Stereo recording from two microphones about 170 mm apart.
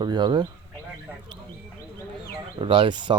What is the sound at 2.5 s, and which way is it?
Speech, 30° right (ahead or behind).